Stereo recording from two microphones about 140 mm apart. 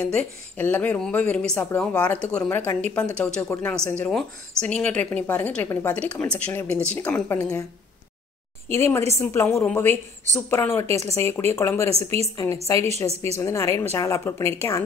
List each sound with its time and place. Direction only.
0.0 s speech: 5° left (ahead or behind)
8.6 s a woman's voice: 20° left (ahead or behind)
12.8 s a woman's voice: 50° right (ahead or behind)
13.4 s a woman's voice: 20° left (ahead or behind)